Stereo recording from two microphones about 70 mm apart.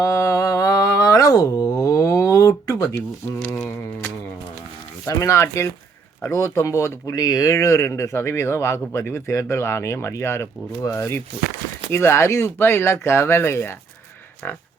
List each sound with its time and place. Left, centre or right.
0.0 s humming: left
5.0 s speech: left
7.5 s speech: left
14.4 s speech: left